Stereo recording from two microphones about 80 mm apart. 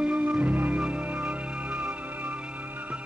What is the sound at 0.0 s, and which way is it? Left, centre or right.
Music, centre.